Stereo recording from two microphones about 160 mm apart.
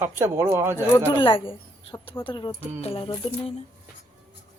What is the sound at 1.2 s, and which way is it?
Speech, 35° left (ahead or behind).